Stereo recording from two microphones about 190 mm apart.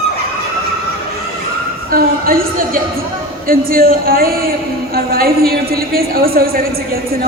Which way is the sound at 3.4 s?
50° right (ahead or behind).